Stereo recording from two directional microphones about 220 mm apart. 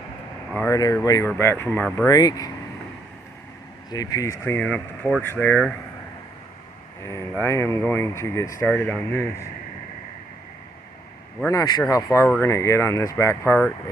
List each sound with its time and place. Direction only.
0.5 s speech: 15° left (ahead or behind)
2.1 s speech: 15° left (ahead or behind)
3.9 s speech: 15° left (ahead or behind)
7.4 s speech: 10° left (ahead or behind)
11.4 s speech: 15° left (ahead or behind)